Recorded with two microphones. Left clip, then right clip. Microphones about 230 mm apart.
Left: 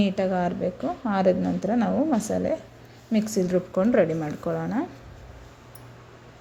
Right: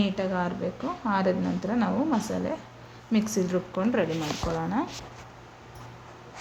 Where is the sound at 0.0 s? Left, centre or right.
Centre.